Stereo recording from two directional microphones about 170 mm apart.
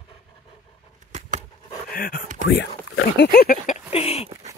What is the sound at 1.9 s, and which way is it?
Speech, 60° left (ahead or behind).